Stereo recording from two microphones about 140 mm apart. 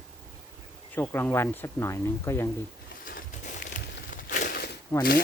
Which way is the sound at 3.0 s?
75° left (ahead or behind).